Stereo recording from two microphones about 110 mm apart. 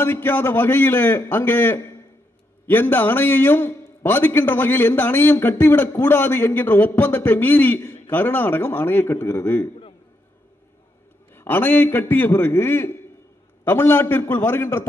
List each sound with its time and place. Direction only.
0.0 s a man's voice: 20° left (ahead or behind)
11.3 s a man's voice: 20° left (ahead or behind)